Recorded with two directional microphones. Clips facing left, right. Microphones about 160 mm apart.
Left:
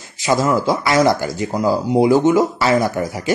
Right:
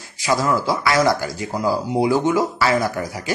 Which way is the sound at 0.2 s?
25° left (ahead or behind).